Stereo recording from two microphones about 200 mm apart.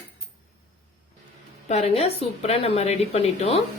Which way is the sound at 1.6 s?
35° left (ahead or behind).